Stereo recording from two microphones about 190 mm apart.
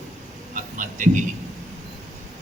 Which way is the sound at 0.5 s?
45° right (ahead or behind).